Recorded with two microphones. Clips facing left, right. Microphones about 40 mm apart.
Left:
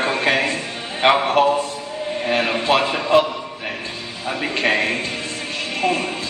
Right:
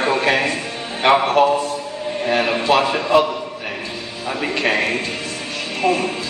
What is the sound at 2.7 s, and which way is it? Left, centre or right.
Speech, left.